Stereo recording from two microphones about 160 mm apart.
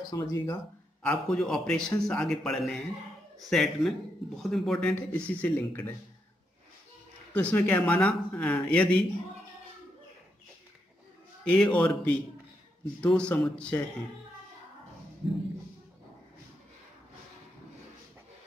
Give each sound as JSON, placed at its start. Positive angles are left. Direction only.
{"t": 0.1, "sound": "speech", "side_deg": 20}
{"t": 1.0, "sound": "speech", "side_deg": 5}
{"t": 7.3, "sound": "speech", "side_deg": 10}
{"t": 11.4, "sound": "speech", "side_deg": 10}
{"t": 13.0, "sound": "speech", "side_deg": 5}
{"t": 15.2, "sound": "speech", "side_deg": -35}